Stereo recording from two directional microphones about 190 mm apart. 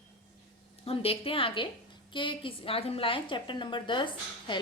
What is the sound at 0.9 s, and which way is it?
A woman's voice, 30° left (ahead or behind).